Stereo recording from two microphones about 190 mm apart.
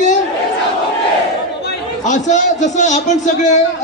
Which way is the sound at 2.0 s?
40° left (ahead or behind).